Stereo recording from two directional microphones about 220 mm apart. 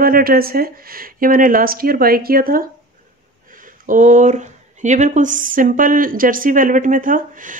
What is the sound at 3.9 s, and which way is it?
Speech, 35° right (ahead or behind).